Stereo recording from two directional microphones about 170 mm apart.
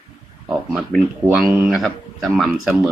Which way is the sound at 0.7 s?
Centre (ahead or behind).